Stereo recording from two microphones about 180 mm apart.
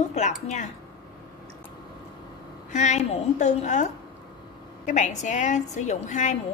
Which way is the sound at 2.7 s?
40° left (ahead or behind).